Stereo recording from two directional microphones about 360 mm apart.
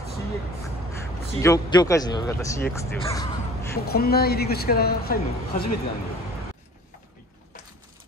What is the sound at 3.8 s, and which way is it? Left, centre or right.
A woman's voice, left.